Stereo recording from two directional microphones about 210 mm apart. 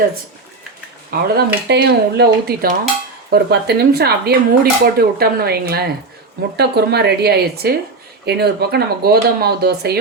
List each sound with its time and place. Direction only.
1.1 s speech: 45° right (ahead or behind)